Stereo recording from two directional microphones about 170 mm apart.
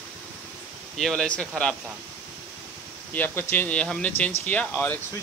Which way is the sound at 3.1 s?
10° left (ahead or behind).